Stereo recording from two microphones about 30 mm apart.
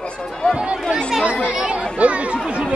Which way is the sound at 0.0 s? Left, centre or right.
Left.